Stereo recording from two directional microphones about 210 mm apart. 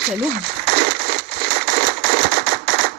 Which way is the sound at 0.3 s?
50° right (ahead or behind).